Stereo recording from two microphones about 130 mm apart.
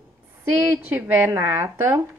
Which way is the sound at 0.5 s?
10° right (ahead or behind).